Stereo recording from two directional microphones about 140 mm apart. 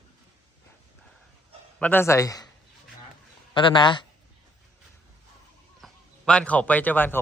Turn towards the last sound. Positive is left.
turn(degrees=10)  # may be behind; listen again after turning